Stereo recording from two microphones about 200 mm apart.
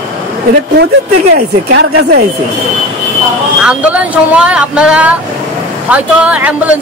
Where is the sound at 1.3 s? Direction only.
55° right (ahead or behind).